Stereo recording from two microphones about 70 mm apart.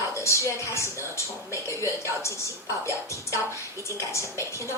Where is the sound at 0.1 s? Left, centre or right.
Left.